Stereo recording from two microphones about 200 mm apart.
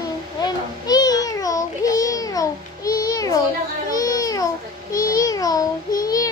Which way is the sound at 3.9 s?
15° left (ahead or behind).